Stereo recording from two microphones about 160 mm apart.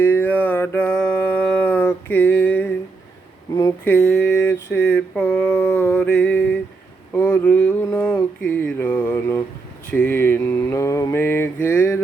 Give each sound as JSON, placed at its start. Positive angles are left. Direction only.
{"t": 0.0, "sound": "mantra", "side_deg": 10}
{"t": 3.5, "sound": "speech", "side_deg": 20}
{"t": 3.8, "sound": "a sound", "side_deg": 10}
{"t": 4.5, "sound": "mantra", "side_deg": 10}
{"t": 7.1, "sound": "a sound", "side_deg": 10}
{"t": 8.6, "sound": "mantra", "side_deg": 10}